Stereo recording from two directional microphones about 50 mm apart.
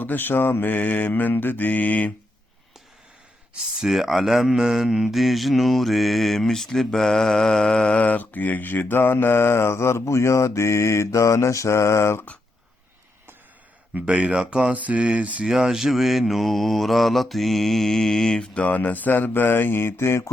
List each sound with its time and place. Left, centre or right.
0.0 s mantra: left
3.8 s speech: centre; by 12.2 s left
14.0 s speech: right
14.8 s speech: right
15.4 s mantra: centre
18.6 s speech: left